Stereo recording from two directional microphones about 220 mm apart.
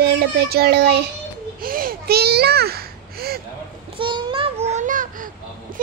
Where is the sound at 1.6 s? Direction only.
40° right (ahead or behind).